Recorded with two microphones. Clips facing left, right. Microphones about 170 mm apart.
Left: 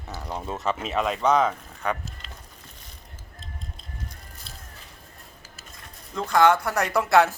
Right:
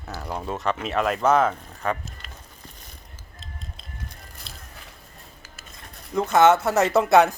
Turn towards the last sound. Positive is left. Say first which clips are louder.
# right 3 dB
turn(degrees=-20)  # may be behind; listen again after turning